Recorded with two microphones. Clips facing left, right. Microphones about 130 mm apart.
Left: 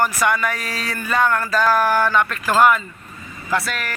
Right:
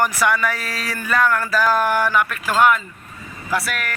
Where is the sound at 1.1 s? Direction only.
25° left (ahead or behind).